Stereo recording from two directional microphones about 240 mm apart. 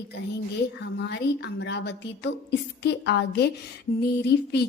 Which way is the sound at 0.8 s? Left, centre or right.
Left.